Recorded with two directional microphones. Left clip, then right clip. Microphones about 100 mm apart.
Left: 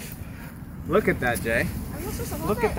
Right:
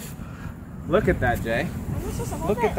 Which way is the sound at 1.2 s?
Centre (ahead or behind).